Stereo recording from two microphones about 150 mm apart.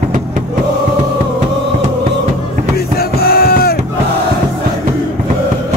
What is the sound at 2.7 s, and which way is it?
Music, 90° left.